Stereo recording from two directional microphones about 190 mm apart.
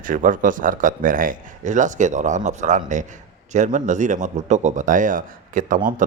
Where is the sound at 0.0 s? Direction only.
45° right (ahead or behind).